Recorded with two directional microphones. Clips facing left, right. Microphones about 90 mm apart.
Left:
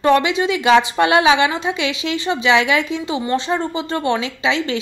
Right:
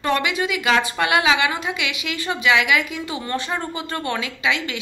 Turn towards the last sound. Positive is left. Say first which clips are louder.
# left 4 dB
turn(degrees=30)  # may be behind; listen again after turning